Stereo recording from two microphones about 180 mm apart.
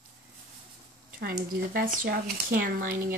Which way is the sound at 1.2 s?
55° right (ahead or behind).